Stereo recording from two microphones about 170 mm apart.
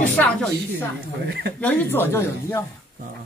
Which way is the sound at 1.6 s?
10° left (ahead or behind).